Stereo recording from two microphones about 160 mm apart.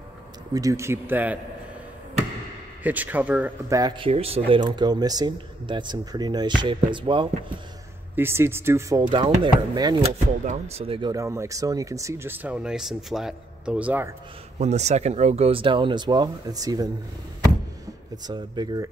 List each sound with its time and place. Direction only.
0.5 s speech: 20° right (ahead or behind)
2.8 s speech: 10° right (ahead or behind)
4.0 s speech: 35° right (ahead or behind)
8.2 s speech: 15° right (ahead or behind)
10.0 s speech: 45° right (ahead or behind); by 14.1 s 10° right (ahead or behind)
14.6 s speech: 45° right (ahead or behind); by 16.9 s 25° right (ahead or behind)
18.2 s speech: 25° right (ahead or behind)